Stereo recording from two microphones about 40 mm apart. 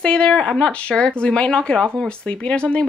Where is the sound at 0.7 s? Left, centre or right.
Left.